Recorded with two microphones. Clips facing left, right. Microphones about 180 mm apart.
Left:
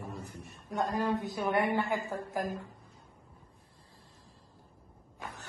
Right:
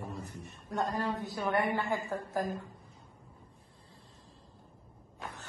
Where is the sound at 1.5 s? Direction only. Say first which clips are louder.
Left 1 dB; 20° left (ahead or behind).